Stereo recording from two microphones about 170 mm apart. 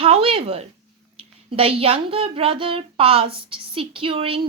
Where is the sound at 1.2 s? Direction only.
35° right (ahead or behind).